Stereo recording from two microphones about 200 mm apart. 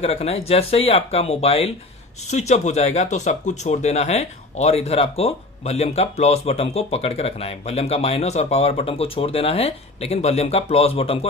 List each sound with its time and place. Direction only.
0.0 s speech: 30° left (ahead or behind)